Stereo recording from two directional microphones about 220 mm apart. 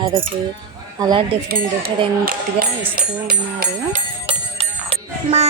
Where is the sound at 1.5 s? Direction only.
40° right (ahead or behind).